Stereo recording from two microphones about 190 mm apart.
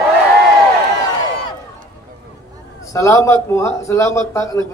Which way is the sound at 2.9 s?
15° left (ahead or behind).